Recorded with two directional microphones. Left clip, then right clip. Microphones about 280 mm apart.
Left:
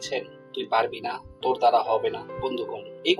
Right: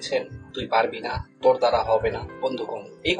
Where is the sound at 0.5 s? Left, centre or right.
Left.